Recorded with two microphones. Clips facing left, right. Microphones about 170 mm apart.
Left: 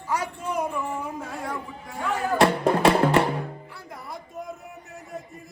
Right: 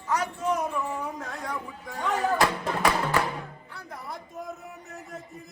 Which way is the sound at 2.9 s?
30° left (ahead or behind).